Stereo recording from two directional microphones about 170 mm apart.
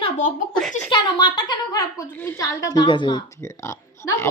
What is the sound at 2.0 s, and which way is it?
A woman's voice, 10° left (ahead or behind).